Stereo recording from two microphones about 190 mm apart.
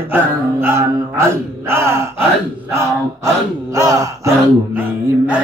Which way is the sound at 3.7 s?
15° right (ahead or behind).